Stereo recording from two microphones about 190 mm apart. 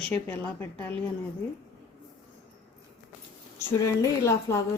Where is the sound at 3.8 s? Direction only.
15° left (ahead or behind).